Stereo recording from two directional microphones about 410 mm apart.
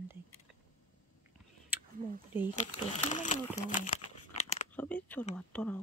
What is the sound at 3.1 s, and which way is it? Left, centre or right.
Speech, centre.